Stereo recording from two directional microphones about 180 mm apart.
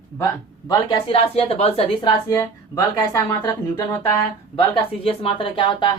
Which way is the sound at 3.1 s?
20° left (ahead or behind).